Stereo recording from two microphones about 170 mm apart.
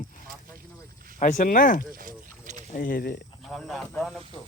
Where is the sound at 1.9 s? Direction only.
55° right (ahead or behind).